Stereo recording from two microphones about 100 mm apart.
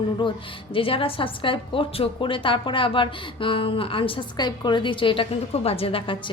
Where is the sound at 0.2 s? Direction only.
60° left (ahead or behind).